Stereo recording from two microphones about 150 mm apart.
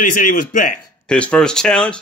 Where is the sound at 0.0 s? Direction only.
65° left (ahead or behind).